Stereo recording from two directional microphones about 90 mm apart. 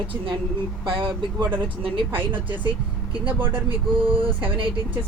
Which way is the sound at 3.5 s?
75° right (ahead or behind).